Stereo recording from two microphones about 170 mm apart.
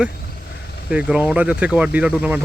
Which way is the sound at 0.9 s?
5° right (ahead or behind).